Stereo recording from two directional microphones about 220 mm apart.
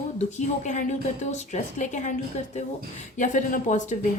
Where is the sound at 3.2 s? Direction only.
35° left (ahead or behind).